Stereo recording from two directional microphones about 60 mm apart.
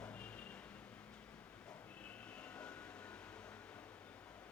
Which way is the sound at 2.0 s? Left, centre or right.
Left.